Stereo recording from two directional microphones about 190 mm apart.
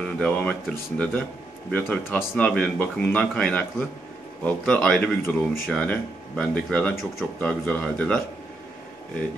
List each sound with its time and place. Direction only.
0.0 s speech: 5° left (ahead or behind)